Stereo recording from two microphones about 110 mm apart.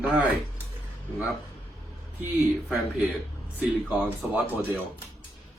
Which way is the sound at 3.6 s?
10° right (ahead or behind).